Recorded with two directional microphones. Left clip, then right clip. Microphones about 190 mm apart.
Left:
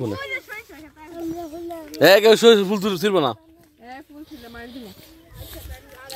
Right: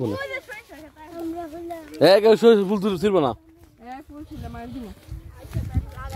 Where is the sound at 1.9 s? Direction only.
5° left (ahead or behind).